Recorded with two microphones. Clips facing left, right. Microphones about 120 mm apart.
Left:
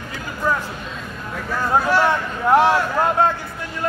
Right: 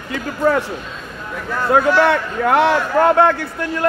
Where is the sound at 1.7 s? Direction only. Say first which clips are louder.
Right 4 dB; 75° right (ahead or behind).